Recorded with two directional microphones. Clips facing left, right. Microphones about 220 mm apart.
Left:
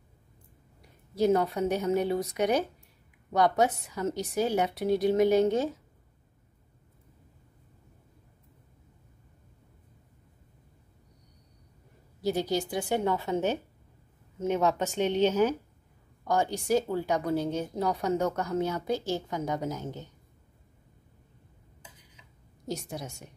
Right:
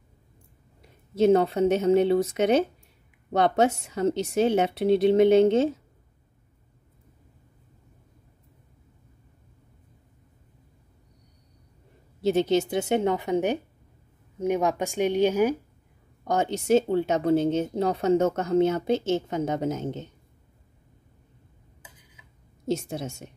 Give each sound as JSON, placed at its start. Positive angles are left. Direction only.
{"t": 1.1, "sound": "speech", "side_deg": -25}
{"t": 12.2, "sound": "speech", "side_deg": -25}
{"t": 16.3, "sound": "speech", "side_deg": -20}
{"t": 22.7, "sound": "speech", "side_deg": -25}